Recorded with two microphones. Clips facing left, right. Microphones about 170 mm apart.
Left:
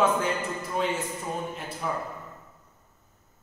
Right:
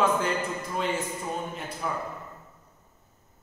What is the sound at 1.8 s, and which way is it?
Speech, centre (ahead or behind).